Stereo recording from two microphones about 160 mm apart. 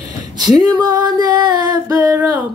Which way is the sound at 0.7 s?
25° right (ahead or behind).